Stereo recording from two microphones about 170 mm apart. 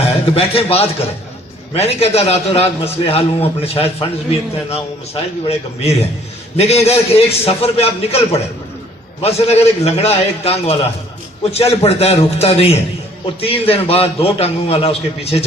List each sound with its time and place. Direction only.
0.3 s a man's voice: 35° left (ahead or behind)